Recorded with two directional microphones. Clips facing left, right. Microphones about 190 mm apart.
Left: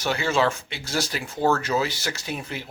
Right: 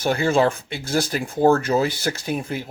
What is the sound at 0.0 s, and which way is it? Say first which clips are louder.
Speech: right 4 dB; 50° right (ahead or behind).